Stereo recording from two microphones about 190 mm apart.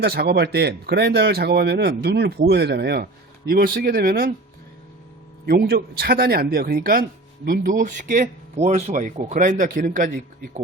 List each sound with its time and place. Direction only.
0.0 s speech: 60° right (ahead or behind)
5.5 s speech: 55° right (ahead or behind)